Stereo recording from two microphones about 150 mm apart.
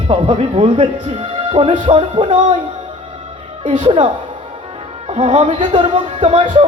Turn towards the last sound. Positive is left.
turn(degrees=-35)  # may be behind; listen again after turning